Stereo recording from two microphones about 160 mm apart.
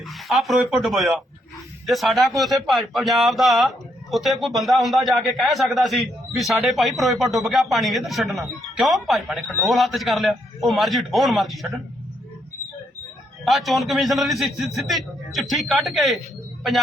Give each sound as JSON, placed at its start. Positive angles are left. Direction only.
{"t": 0.1, "sound": "a man's voice", "side_deg": 0}
{"t": 13.4, "sound": "a man's voice", "side_deg": 0}